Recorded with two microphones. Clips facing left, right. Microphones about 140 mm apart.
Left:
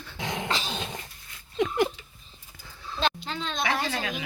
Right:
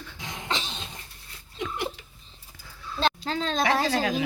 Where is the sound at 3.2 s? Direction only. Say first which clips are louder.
Right 5 dB; 35° right (ahead or behind).